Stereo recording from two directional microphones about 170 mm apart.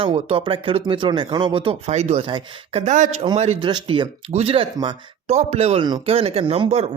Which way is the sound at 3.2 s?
35° right (ahead or behind).